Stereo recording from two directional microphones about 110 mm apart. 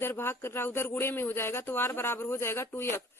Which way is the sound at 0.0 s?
20° left (ahead or behind).